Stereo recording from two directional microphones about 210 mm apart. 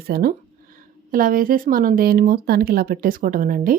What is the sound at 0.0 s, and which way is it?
Speech, 45° right (ahead or behind).